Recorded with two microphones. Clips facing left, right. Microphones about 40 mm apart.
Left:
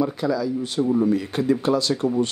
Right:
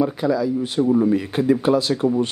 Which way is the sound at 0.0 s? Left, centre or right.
Centre.